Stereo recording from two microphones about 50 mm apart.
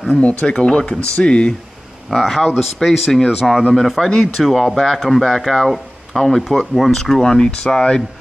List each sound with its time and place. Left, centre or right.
0.2 s speech: left
2.0 s speech: centre